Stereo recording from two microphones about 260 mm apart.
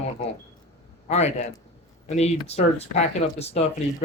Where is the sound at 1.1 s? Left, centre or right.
Left.